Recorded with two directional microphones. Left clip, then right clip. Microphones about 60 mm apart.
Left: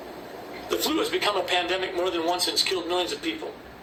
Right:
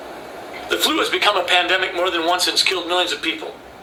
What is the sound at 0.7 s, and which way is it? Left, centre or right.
A man's voice, left.